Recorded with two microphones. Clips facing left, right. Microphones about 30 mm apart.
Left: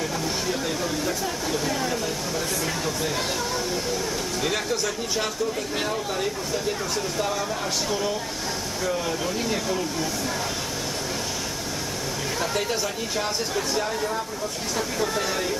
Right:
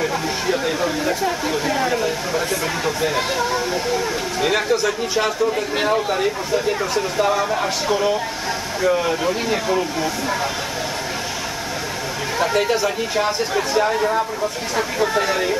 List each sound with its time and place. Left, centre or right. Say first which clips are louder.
0.0 s speech: right 6 dB; right
12.4 s speech: right 9 dB; right